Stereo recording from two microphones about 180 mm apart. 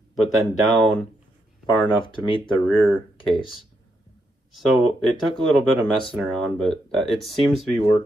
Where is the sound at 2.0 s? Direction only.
30° left (ahead or behind).